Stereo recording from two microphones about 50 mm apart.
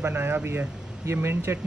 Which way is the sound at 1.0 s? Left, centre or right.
Right.